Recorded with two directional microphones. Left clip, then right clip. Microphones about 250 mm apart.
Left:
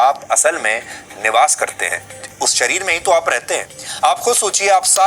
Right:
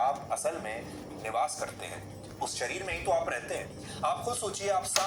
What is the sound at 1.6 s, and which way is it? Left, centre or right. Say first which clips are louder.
Speech: left 18 dB; left.